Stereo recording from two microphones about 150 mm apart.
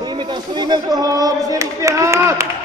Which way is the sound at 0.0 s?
30° right (ahead or behind).